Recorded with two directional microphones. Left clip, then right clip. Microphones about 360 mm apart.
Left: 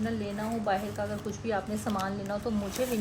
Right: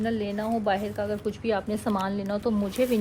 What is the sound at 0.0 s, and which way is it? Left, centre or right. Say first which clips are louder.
Speech: right 5 dB; right.